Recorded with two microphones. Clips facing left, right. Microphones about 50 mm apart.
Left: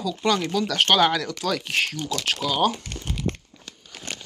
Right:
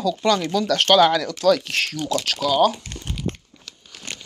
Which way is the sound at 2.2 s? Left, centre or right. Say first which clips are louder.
Right 2 dB; left.